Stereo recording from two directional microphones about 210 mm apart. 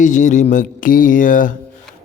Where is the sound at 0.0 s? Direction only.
35° left (ahead or behind).